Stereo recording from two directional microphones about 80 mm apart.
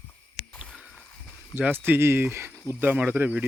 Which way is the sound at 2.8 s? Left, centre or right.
Right.